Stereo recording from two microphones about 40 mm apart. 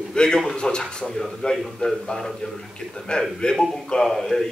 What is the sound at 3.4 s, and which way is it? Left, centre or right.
A man's voice, centre.